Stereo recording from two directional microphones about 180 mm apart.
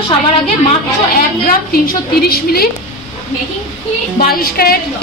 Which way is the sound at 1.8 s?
60° left (ahead or behind).